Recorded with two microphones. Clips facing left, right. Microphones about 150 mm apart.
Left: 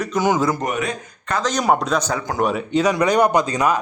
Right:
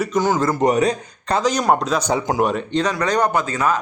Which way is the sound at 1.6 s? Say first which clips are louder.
Even; centre (ahead or behind).